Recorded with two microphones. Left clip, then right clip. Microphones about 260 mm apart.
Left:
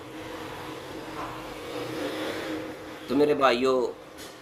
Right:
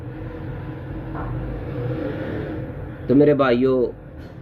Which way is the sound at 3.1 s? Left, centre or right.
Centre.